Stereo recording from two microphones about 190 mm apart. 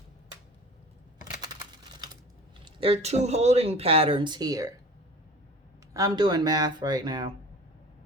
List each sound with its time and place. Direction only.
2.6 s speech: 30° right (ahead or behind)
5.9 s speech: 20° right (ahead or behind)